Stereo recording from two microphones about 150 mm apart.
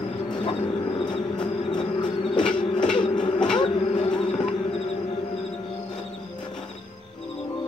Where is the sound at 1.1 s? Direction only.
30° left (ahead or behind).